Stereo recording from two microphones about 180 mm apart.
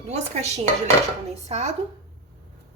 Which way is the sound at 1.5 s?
35° right (ahead or behind).